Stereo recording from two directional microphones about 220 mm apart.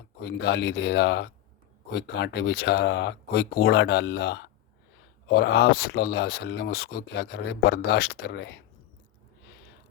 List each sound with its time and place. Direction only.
0.2 s speech: 50° left (ahead or behind)